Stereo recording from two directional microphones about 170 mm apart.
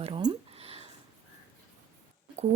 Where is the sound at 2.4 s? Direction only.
40° right (ahead or behind).